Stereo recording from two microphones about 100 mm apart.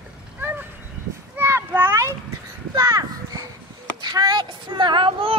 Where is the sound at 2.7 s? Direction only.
40° right (ahead or behind).